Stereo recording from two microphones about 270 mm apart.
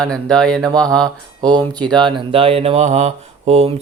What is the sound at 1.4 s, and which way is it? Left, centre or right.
Speech, centre.